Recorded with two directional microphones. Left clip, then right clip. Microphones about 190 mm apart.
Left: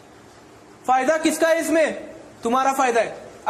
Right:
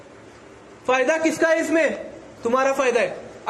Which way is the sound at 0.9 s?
50° left (ahead or behind).